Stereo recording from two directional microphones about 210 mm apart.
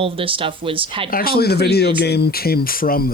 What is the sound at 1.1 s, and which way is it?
Speech, 45° left (ahead or behind).